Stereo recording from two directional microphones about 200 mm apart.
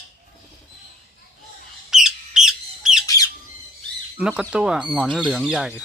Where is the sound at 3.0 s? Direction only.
15° left (ahead or behind).